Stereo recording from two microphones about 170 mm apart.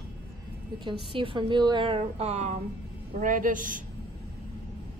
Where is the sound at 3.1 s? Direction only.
50° right (ahead or behind).